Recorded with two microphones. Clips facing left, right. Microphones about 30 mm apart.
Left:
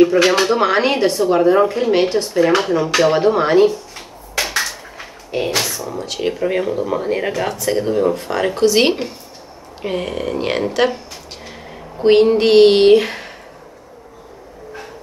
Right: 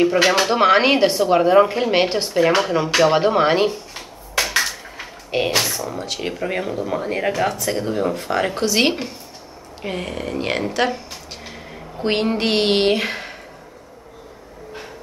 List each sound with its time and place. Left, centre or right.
0.0 s speech: centre; by 3.8 s right
5.3 s a sound: right
6.0 s speech: centre